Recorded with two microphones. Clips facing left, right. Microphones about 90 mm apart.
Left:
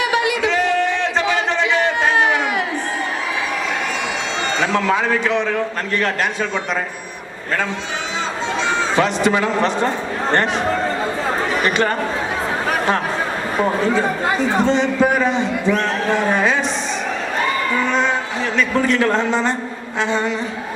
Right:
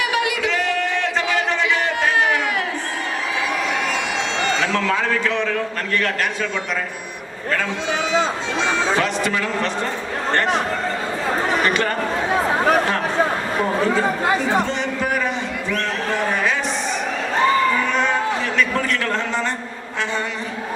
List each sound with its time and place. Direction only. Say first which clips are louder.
0.0 s a sound: left 3 dB; 25° left (ahead or behind)
4.6 s a man's voice: left 3 dB; 20° left (ahead or behind)
9.0 s a man's voice: left 4 dB; 20° left (ahead or behind)
14.6 s a man's voice: left 7 dB; 25° left (ahead or behind)
18.5 s a man's voice: left 3 dB; 20° left (ahead or behind)